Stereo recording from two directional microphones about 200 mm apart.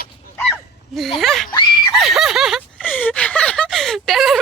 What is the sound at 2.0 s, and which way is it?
Speech, centre (ahead or behind).